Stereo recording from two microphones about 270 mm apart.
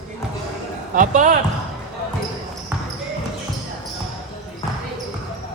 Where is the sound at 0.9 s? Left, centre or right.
Right.